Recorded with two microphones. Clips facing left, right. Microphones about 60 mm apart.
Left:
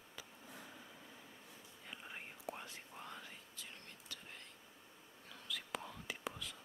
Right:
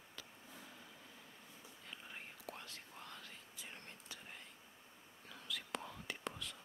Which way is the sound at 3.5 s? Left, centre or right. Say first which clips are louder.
Right 1 dB; centre.